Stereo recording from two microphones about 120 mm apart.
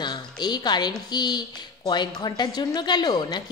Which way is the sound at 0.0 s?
35° left (ahead or behind).